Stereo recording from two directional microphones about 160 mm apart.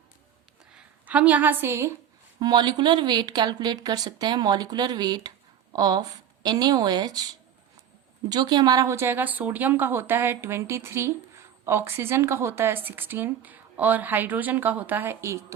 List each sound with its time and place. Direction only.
0.7 s speech: 10° right (ahead or behind)
2.4 s speech: 25° right (ahead or behind)
8.3 s a woman's voice: 25° right (ahead or behind)